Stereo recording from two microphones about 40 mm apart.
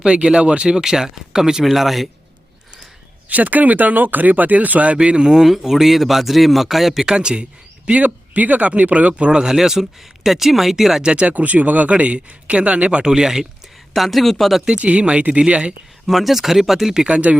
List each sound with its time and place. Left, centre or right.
0.0 s speech: right
0.8 s speech: centre
1.6 s speech: centre
3.2 s speech: right; by 7.0 s centre
7.0 s speech: right
7.9 s speech: right; by 11.0 s centre
11.0 s speech: right
11.3 s speech: right
13.1 s speech: centre
13.9 s speech: centre
14.8 s speech: right
16.0 s speech: centre
17.1 s speech: right